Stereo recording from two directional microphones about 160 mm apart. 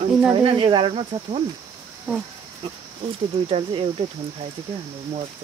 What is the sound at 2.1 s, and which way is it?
Speech, 5° right (ahead or behind).